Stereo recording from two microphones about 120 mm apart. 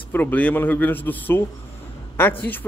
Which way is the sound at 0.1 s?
15° left (ahead or behind).